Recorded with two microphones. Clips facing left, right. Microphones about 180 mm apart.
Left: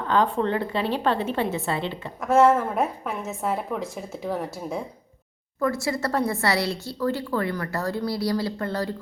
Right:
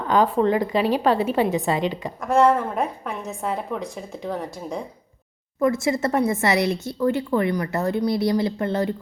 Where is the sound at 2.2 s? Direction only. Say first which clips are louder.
Even; 5° left (ahead or behind).